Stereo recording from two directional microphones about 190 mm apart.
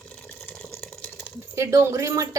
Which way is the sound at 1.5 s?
15° right (ahead or behind).